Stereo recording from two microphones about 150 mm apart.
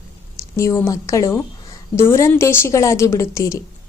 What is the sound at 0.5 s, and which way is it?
A woman's voice, 20° left (ahead or behind).